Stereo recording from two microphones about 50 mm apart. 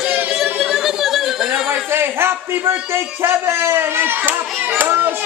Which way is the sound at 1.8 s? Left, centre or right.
Right.